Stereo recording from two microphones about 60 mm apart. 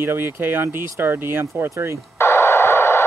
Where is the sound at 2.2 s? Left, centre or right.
Left.